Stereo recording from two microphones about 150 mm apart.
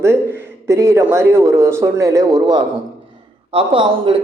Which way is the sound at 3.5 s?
35° right (ahead or behind).